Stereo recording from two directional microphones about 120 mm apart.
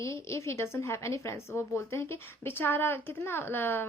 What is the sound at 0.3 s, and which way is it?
A woman's voice, 25° left (ahead or behind).